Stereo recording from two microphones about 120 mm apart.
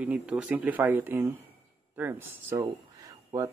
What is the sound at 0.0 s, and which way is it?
Speech, 10° right (ahead or behind).